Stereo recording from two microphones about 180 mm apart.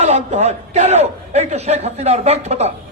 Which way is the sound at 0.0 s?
35° right (ahead or behind).